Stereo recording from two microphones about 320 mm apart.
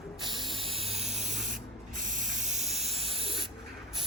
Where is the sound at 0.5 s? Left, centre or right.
Centre.